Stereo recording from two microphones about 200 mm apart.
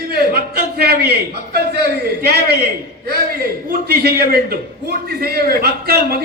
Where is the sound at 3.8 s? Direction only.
50° right (ahead or behind).